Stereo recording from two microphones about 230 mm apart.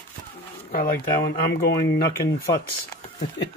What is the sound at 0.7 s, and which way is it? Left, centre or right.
Speech, left.